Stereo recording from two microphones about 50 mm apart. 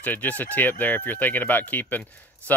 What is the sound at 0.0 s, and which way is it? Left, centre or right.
Speech, left.